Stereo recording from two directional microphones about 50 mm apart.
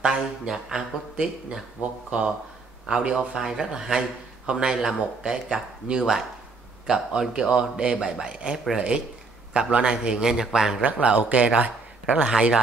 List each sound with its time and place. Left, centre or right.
0.0 s speech: centre
3.4 s speech: centre
10.8 s speech: right